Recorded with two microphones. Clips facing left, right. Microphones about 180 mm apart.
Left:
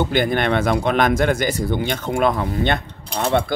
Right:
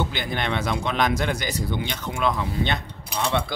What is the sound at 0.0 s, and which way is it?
Speech, 55° left (ahead or behind).